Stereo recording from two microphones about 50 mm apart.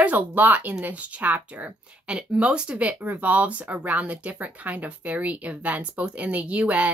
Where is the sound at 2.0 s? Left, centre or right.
Right.